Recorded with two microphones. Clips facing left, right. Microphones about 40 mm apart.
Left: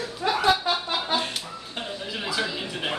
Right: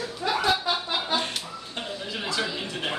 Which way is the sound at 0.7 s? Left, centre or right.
Centre.